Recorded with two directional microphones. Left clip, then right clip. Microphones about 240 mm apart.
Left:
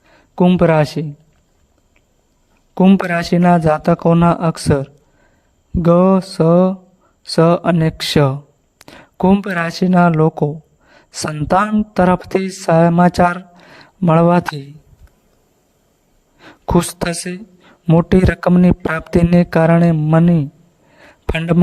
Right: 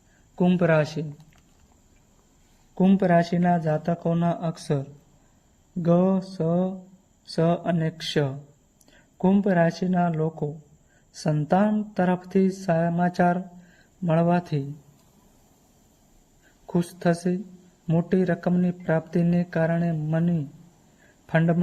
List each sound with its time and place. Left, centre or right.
0.3 s speech: left
2.7 s a woman's voice: left
16.6 s a woman's voice: left